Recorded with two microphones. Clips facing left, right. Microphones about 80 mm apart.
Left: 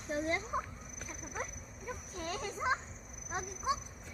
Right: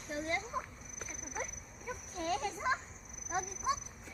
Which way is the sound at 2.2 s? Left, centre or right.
Centre.